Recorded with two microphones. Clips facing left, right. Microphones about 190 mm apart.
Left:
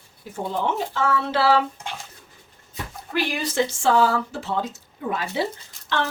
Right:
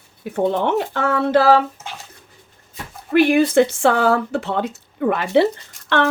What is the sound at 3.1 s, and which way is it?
Speech, 55° right (ahead or behind).